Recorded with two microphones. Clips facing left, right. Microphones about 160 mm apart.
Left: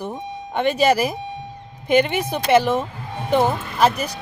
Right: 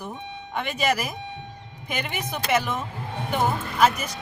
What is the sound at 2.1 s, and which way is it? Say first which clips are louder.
Speech: left 8 dB; 30° left (ahead or behind).